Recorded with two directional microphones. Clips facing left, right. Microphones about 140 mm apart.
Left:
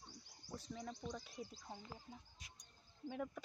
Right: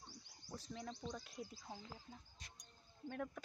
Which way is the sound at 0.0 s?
Centre (ahead or behind).